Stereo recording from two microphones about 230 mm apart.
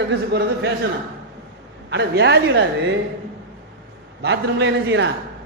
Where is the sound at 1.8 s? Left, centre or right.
Right.